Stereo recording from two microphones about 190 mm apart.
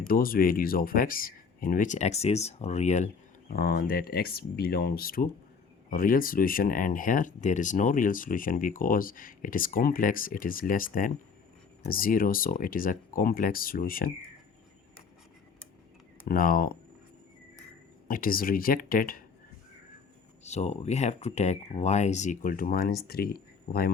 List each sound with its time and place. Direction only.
0.1 s speech: 50° left (ahead or behind)
3.5 s speech: 55° left (ahead or behind)
16.2 s speech: 50° left (ahead or behind)
18.1 s speech: 50° left (ahead or behind)
20.4 s speech: 35° left (ahead or behind); by 23.9 s 55° left (ahead or behind)